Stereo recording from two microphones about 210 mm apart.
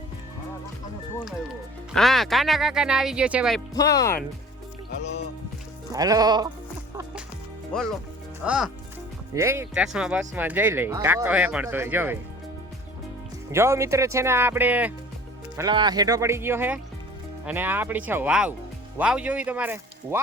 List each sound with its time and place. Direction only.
2.0 s speech: centre (ahead or behind)
3.8 s speech: 15° left (ahead or behind)
5.9 s speech: 15° right (ahead or behind)
7.7 s speech: centre (ahead or behind)
9.3 s speech: 15° right (ahead or behind)
13.5 s speech: 15° right (ahead or behind)
15.5 s speech: 20° right (ahead or behind)